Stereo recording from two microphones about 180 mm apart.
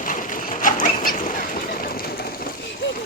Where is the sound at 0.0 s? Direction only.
45° left (ahead or behind).